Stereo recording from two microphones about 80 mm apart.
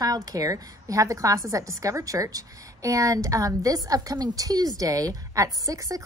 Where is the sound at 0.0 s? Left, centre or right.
Right.